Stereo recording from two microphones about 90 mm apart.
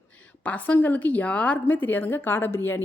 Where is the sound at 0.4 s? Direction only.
20° left (ahead or behind).